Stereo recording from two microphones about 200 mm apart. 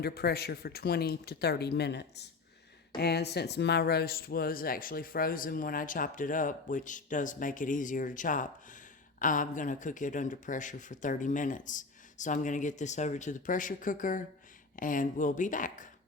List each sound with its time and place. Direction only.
0.0 s speech: 50° left (ahead or behind)